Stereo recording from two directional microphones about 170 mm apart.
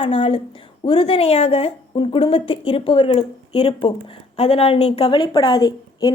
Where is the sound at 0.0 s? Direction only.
35° left (ahead or behind).